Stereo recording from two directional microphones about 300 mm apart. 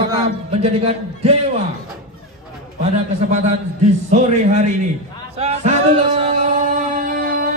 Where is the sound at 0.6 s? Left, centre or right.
Centre.